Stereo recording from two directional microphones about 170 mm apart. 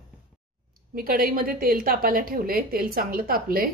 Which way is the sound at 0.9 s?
55° right (ahead or behind).